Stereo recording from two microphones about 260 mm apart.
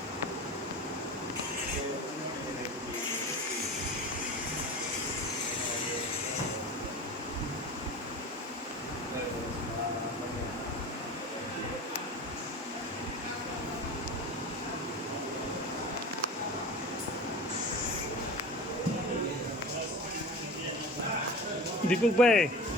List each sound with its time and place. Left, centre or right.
21.8 s speech: centre